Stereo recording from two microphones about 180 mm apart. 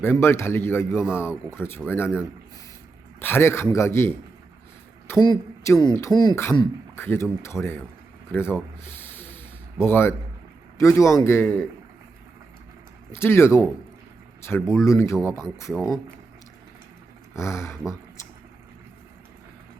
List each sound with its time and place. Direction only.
0.0 s a man's voice: 15° left (ahead or behind)
3.2 s a man's voice: 10° left (ahead or behind)
5.2 s a man's voice: 20° left (ahead or behind)
8.3 s a sound: 10° left (ahead or behind)
9.8 s a man's voice: 15° left (ahead or behind)
13.1 s a man's voice: 15° left (ahead or behind)
15.7 s speech: centre (ahead or behind)
17.3 s a man's voice: 15° left (ahead or behind)